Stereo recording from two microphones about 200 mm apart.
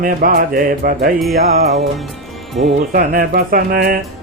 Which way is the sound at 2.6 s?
35° right (ahead or behind).